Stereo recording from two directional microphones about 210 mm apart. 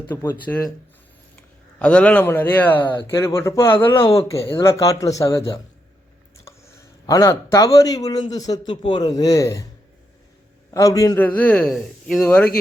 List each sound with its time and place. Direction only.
0.1 s a man's voice: 10° left (ahead or behind)
1.8 s a man's voice: 5° left (ahead or behind)
10.8 s a man's voice: 15° left (ahead or behind)